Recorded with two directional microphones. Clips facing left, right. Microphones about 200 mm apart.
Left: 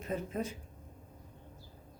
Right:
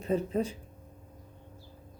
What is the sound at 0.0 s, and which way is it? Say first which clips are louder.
Speech: right 7 dB; 30° right (ahead or behind).